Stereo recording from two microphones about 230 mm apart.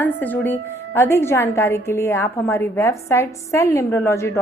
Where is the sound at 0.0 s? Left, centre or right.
Centre.